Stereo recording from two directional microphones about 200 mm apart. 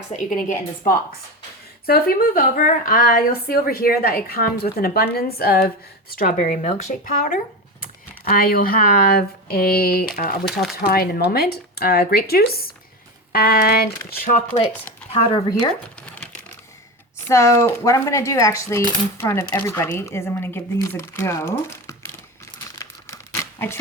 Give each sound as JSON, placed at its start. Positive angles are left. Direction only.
{"t": 0.3, "sound": "a woman's voice", "side_deg": 40}
{"t": 15.1, "sound": "speech", "side_deg": 20}
{"t": 16.0, "sound": "a sound", "side_deg": 5}
{"t": 17.2, "sound": "speech", "side_deg": 15}
{"t": 22.8, "sound": "tearing", "side_deg": 15}